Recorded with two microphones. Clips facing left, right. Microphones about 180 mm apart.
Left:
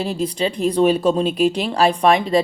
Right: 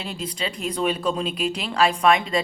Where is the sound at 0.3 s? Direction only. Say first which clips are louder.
Left 9 dB; 30° left (ahead or behind).